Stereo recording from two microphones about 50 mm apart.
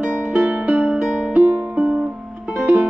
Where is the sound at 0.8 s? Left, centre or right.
Centre.